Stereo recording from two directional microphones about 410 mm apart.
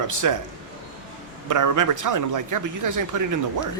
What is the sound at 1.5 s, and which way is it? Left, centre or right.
Speech, right.